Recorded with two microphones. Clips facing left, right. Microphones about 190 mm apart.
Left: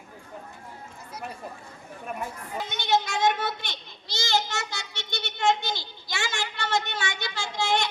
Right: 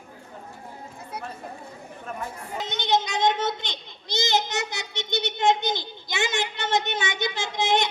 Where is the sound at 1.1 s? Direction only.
60° right (ahead or behind).